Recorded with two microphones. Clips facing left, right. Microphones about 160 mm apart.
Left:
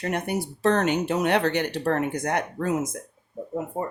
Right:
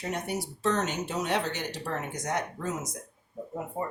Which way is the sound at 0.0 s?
60° left (ahead or behind).